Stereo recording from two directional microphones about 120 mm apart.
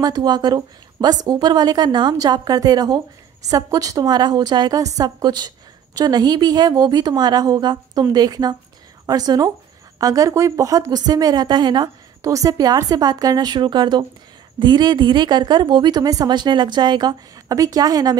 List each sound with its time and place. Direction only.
0.0 s a woman's voice: 35° right (ahead or behind)